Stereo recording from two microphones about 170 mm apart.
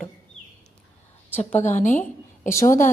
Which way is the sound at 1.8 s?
45° left (ahead or behind).